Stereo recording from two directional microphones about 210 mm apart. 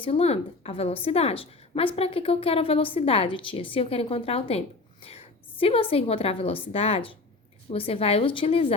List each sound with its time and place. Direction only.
0.0 s a woman's voice: 30° left (ahead or behind)